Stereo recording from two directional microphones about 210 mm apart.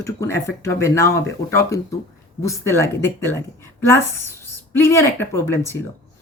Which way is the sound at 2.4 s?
15° left (ahead or behind).